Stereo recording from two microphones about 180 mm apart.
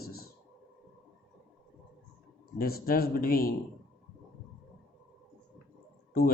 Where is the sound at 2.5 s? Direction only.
55° left (ahead or behind).